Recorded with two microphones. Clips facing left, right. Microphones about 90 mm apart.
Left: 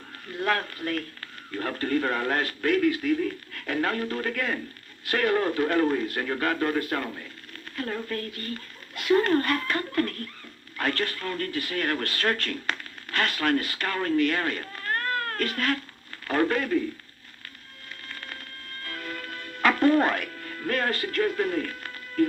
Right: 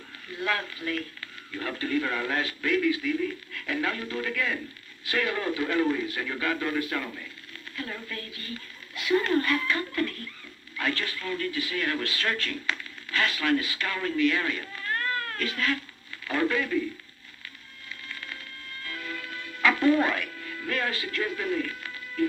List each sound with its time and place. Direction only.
0.3 s speech: 45° left (ahead or behind)
18.1 s music: 45° left (ahead or behind)